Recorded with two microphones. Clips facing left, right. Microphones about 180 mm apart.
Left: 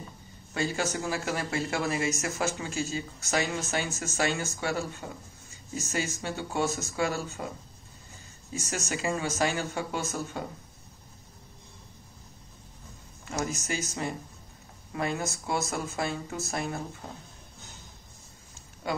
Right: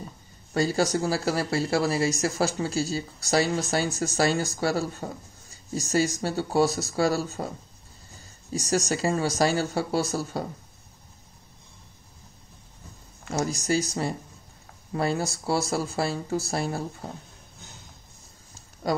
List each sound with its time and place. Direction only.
0.5 s speech: 40° right (ahead or behind)
13.3 s speech: 35° right (ahead or behind)
18.8 s speech: 40° right (ahead or behind)